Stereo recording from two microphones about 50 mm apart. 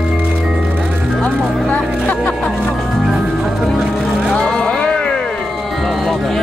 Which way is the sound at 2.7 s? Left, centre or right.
Centre.